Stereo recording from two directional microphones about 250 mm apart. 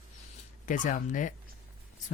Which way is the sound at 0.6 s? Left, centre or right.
Left.